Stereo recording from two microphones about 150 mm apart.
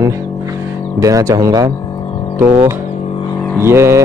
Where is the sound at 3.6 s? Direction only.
15° right (ahead or behind).